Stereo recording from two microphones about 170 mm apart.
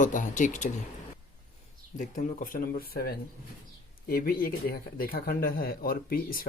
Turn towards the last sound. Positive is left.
turn(degrees=60)  # may be behind; listen again after turning